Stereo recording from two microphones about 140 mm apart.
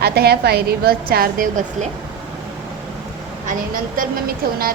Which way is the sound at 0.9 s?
90° right.